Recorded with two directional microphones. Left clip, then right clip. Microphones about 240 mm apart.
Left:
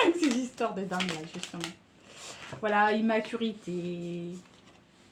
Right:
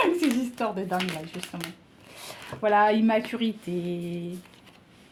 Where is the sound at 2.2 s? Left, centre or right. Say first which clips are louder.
Right 5 dB; right.